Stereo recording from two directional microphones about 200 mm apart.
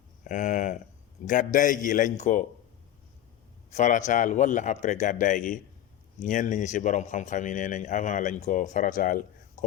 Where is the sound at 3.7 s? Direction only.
35° left (ahead or behind).